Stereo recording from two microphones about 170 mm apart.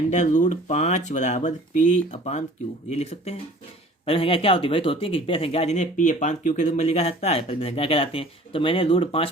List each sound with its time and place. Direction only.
0.1 s speech: 45° left (ahead or behind)